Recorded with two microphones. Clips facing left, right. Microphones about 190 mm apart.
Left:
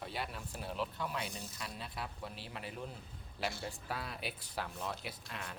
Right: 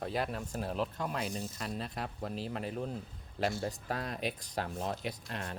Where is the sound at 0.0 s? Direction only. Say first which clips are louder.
Right 7 dB; 45° right (ahead or behind).